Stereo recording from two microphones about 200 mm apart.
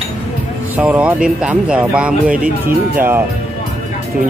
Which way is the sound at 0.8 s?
5° right (ahead or behind).